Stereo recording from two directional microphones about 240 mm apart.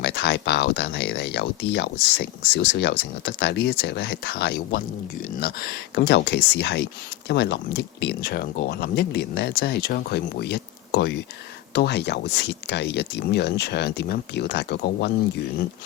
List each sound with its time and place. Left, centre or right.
0.0 s speech: left